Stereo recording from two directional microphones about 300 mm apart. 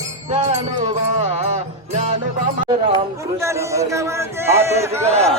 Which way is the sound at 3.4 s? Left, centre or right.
Centre.